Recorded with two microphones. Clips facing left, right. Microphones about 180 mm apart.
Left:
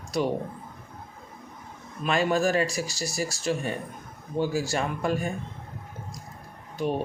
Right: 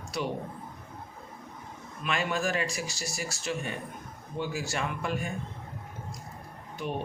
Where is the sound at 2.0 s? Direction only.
35° left (ahead or behind).